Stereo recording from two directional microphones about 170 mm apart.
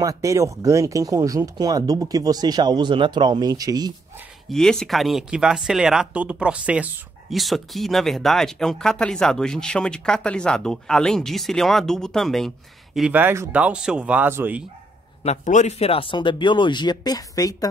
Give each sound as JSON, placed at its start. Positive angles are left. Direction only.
{"t": 0.0, "sound": "speech", "side_deg": -20}
{"t": 4.5, "sound": "speech", "side_deg": 5}
{"t": 15.2, "sound": "speech", "side_deg": 45}